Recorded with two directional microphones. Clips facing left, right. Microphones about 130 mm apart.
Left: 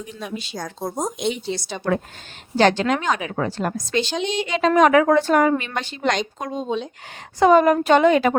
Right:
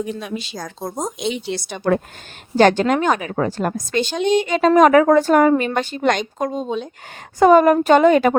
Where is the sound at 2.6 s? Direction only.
50° right (ahead or behind).